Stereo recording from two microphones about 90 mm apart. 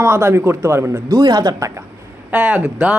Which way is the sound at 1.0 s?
50° right (ahead or behind).